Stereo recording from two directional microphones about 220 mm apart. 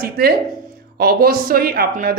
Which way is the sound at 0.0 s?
45° right (ahead or behind).